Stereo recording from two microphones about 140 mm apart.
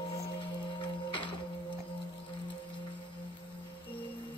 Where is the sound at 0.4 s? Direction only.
35° left (ahead or behind).